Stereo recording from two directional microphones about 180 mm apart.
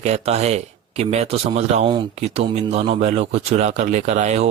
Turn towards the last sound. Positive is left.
turn(degrees=-40)  # may be behind; listen again after turning